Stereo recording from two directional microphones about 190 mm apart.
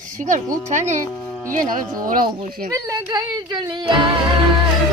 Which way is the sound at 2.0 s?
50° right (ahead or behind).